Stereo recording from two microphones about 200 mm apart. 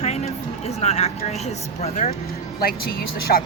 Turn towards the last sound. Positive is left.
turn(degrees=50)  # may be behind; listen again after turning